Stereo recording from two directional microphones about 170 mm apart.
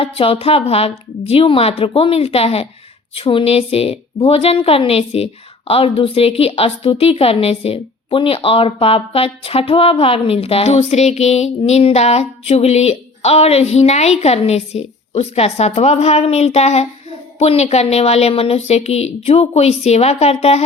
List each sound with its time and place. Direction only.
0.0 s a woman's voice: 35° left (ahead or behind)